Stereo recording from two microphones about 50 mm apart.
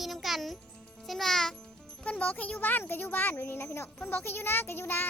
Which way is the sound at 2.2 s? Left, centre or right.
Left.